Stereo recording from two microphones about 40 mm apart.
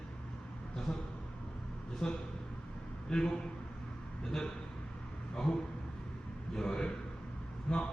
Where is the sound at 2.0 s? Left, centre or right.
Centre.